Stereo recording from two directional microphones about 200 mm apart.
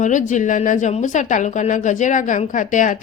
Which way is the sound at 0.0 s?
40° left (ahead or behind).